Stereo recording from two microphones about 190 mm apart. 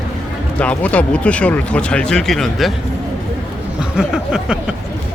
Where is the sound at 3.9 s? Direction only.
5° right (ahead or behind).